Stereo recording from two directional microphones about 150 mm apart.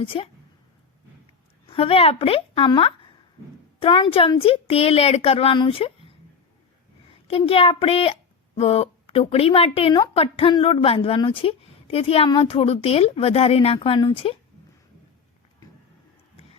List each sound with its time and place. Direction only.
0.0 s a woman's voice: 35° left (ahead or behind)
1.6 s a woman's voice: 40° left (ahead or behind)